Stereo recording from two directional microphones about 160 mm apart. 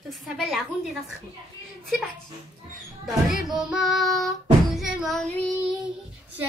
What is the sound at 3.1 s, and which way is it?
Child singing, centre (ahead or behind).